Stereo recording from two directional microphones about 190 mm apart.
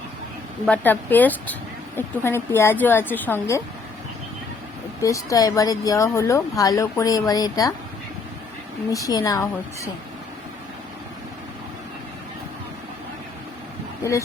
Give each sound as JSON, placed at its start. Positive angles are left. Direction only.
{"t": 0.7, "sound": "speech", "side_deg": 10}
{"t": 5.0, "sound": "speech", "side_deg": 15}
{"t": 8.9, "sound": "speech", "side_deg": 20}